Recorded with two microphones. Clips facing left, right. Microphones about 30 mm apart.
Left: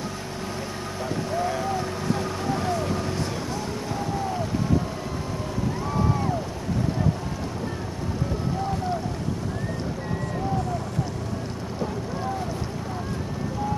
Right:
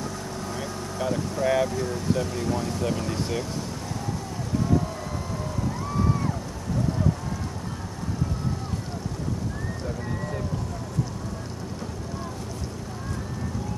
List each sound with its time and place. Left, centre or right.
0.9 s speech: centre